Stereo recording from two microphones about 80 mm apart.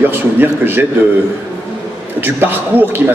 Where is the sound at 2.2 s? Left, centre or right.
Right.